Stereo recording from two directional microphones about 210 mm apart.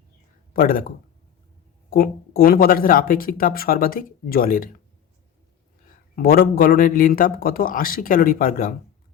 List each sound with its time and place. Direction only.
0.5 s speech: 45° left (ahead or behind)
6.1 s speech: 45° left (ahead or behind)